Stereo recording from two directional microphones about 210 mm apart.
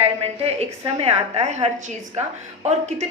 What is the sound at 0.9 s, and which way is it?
Speech, 30° right (ahead or behind).